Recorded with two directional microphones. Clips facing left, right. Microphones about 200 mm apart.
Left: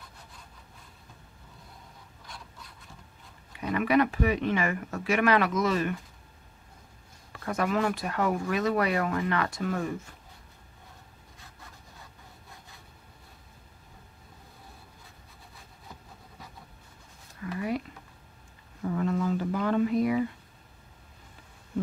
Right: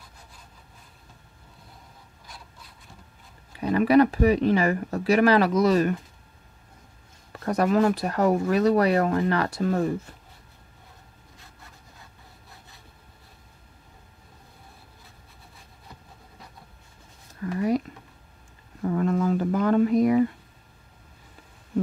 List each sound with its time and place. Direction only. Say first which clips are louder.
3.5 s speech: right 6 dB; 35° right (ahead or behind)
7.3 s speech: right 6 dB; 40° right (ahead or behind)
17.4 s a sound: right 7 dB; 40° right (ahead or behind)